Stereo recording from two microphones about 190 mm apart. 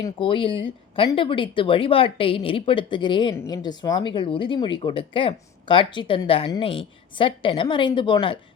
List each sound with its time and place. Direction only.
0.0 s speech: 25° left (ahead or behind)